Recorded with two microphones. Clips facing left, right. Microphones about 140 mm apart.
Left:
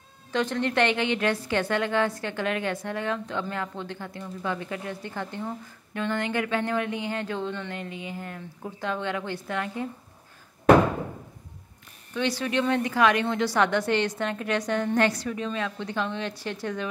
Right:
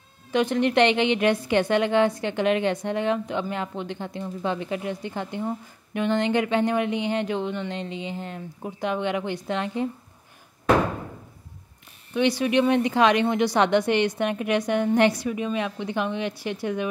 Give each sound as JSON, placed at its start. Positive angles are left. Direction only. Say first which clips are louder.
{"t": 0.3, "sound": "a woman's voice", "louder": "right 5 dB", "side_deg": -15}
{"t": 12.1, "sound": "a woman's voice", "louder": "right 5 dB", "side_deg": -15}